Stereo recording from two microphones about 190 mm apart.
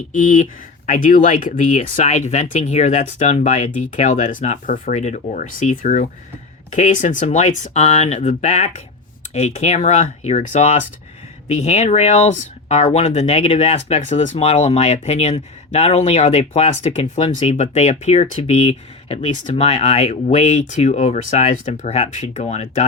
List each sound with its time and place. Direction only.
0.1 s speech: 45° left (ahead or behind)